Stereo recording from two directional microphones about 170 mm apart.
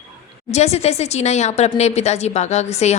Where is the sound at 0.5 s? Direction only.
40° left (ahead or behind).